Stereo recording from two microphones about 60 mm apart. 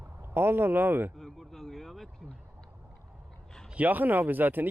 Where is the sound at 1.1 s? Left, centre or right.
Centre.